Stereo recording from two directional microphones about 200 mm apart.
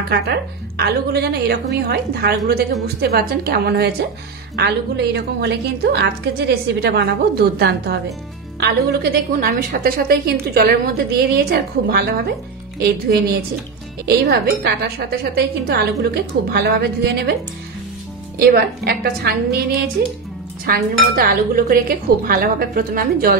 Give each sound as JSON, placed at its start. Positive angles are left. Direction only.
{"t": 0.1, "sound": "a woman's voice", "side_deg": -50}
{"t": 18.4, "sound": "a woman's voice", "side_deg": -50}